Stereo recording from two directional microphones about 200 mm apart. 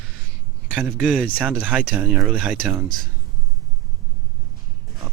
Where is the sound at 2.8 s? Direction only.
45° right (ahead or behind).